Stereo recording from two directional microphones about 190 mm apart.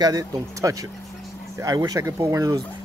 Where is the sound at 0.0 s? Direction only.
20° right (ahead or behind).